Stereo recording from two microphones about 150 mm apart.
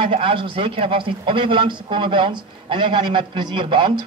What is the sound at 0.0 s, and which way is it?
A man's voice, 35° right (ahead or behind).